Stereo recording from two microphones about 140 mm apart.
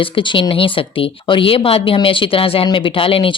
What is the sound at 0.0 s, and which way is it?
Speech, 35° left (ahead or behind).